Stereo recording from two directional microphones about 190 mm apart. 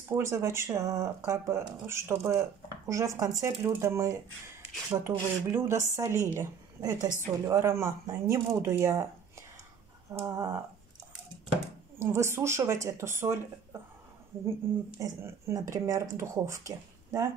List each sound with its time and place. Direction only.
0.1 s speech: 15° right (ahead or behind)
10.2 s speech: 15° right (ahead or behind)
12.0 s speech: 15° right (ahead or behind)
14.6 s speech: 10° right (ahead or behind)